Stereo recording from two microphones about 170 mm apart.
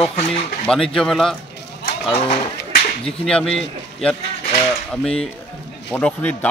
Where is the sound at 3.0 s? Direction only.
5° left (ahead or behind).